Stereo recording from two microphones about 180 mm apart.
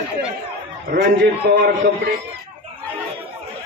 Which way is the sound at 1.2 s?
65° right (ahead or behind).